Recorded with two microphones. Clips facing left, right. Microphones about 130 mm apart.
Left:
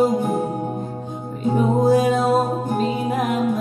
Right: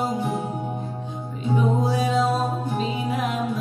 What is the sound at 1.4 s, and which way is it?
Music, 45° left (ahead or behind).